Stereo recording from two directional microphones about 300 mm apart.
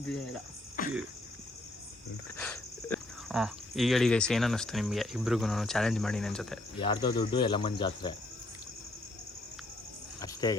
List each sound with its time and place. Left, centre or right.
0.8 s a sound: left
2.4 s speech: centre
6.7 s speech: centre
10.2 s cricket: centre